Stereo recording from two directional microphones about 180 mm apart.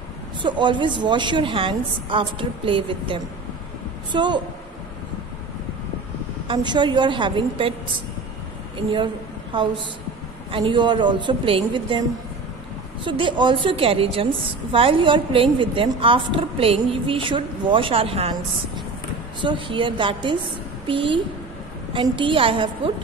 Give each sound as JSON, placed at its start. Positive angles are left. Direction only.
{"t": 0.4, "sound": "a woman's voice", "side_deg": -25}
{"t": 6.4, "sound": "a woman's voice", "side_deg": -25}
{"t": 13.0, "sound": "a woman's voice", "side_deg": -25}
{"t": 19.4, "sound": "a woman's voice", "side_deg": -25}